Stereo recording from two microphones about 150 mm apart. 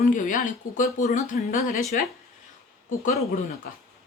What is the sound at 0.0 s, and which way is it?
Speech, 60° left (ahead or behind).